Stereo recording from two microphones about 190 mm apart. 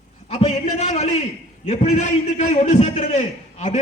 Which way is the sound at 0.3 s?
35° left (ahead or behind).